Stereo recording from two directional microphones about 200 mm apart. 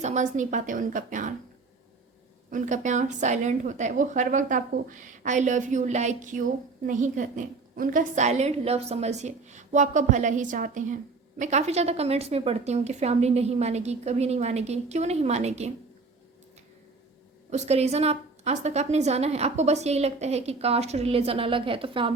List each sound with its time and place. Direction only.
0.0 s a woman's voice: 35° right (ahead or behind)
2.5 s a woman's voice: 40° right (ahead or behind)
17.5 s a woman's voice: 30° right (ahead or behind)